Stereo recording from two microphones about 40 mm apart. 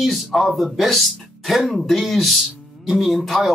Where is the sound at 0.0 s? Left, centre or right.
Centre.